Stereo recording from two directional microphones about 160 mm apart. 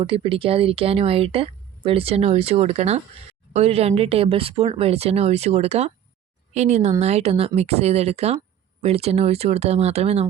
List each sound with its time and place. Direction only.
0.0 s speech: 35° right (ahead or behind)